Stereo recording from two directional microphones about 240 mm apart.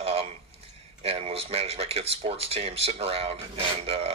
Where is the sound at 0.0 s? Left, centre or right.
Right.